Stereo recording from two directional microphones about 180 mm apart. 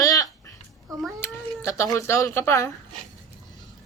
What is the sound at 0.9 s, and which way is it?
Speech, 20° right (ahead or behind).